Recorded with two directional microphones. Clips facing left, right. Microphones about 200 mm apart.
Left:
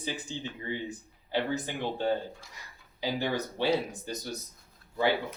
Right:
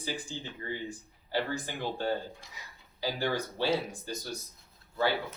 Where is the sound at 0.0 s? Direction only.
20° left (ahead or behind).